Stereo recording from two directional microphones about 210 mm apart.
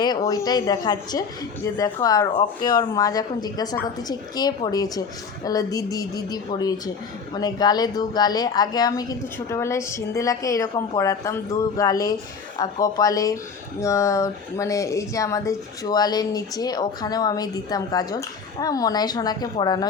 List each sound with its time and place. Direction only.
0.0 s speech: 15° left (ahead or behind)